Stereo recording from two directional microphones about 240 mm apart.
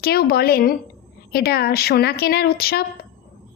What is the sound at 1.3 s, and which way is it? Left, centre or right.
A woman's voice, left.